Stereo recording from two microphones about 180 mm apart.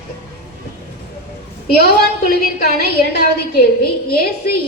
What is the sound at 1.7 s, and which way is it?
A woman's voice, 60° left (ahead or behind).